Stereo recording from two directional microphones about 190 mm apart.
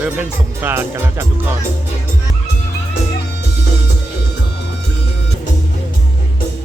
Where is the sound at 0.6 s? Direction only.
10° right (ahead or behind).